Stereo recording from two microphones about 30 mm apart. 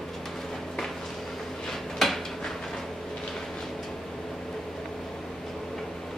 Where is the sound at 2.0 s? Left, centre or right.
Centre.